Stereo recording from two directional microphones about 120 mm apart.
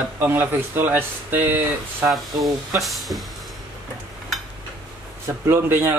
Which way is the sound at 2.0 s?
Centre (ahead or behind).